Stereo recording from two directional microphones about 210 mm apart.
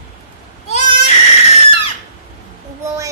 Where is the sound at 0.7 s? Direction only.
35° left (ahead or behind).